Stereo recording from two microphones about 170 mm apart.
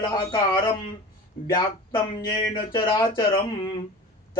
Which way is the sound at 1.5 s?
30° left (ahead or behind).